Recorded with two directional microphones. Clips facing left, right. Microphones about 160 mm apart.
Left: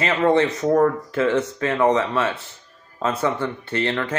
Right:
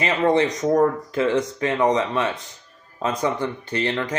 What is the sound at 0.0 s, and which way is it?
Speech, 15° right (ahead or behind).